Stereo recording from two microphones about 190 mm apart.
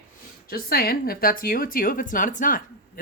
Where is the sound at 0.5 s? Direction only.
55° left (ahead or behind).